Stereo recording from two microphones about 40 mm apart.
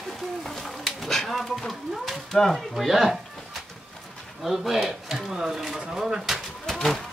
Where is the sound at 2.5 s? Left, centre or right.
Centre.